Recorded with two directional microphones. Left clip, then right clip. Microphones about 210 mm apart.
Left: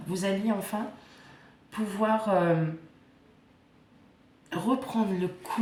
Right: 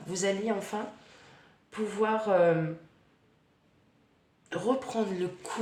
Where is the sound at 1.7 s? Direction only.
30° right (ahead or behind).